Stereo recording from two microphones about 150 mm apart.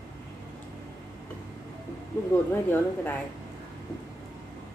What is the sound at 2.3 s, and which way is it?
Speech, 15° left (ahead or behind).